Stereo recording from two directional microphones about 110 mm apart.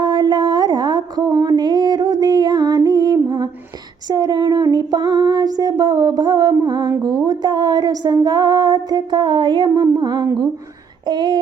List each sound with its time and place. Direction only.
0.0 s a sound: 40° right (ahead or behind)
6.5 s music: 35° right (ahead or behind)
11.0 s speech: 40° right (ahead or behind)